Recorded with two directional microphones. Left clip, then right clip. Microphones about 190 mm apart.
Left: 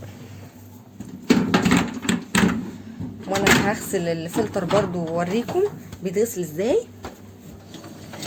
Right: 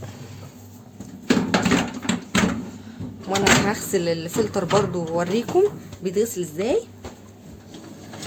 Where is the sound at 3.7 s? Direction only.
10° right (ahead or behind).